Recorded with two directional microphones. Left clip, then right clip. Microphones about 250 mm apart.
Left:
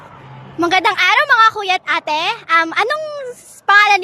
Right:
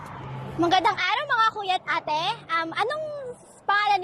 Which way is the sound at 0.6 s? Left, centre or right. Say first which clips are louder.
Left 7 dB; left.